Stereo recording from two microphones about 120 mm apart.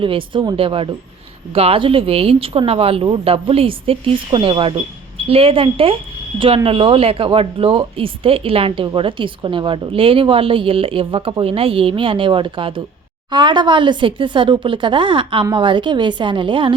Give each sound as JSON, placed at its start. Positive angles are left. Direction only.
{"t": 0.0, "sound": "speech", "side_deg": -45}